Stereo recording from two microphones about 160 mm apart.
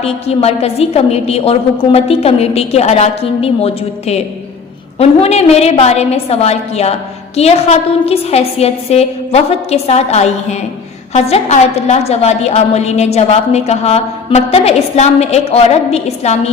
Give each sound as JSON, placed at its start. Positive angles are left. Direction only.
{"t": 0.0, "sound": "a woman's voice", "side_deg": 40}